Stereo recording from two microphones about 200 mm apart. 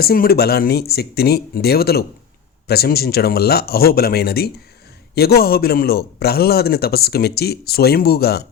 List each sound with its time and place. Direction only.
0.0 s a man's voice: 50° left (ahead or behind)